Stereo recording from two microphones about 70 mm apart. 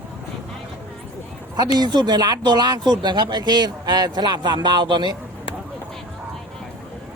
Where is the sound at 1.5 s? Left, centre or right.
Right.